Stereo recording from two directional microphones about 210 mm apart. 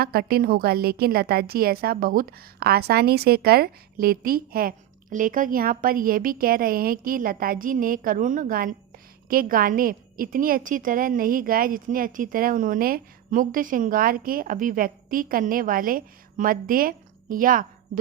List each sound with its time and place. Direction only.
0.0 s a woman's voice: 45° right (ahead or behind)